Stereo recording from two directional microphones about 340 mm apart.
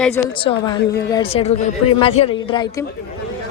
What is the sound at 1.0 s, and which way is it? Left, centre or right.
Speech, centre.